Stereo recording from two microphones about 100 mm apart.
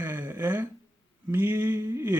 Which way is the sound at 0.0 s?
20° right (ahead or behind).